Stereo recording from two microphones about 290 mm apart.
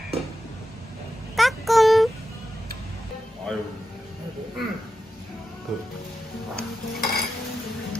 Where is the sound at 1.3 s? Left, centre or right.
Centre.